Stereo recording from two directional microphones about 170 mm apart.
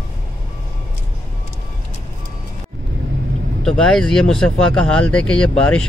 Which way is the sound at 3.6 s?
5° left (ahead or behind).